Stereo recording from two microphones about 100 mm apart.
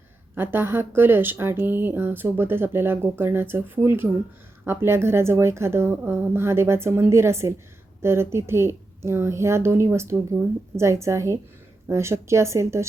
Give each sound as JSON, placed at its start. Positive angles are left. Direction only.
{"t": 0.3, "sound": "speech", "side_deg": -20}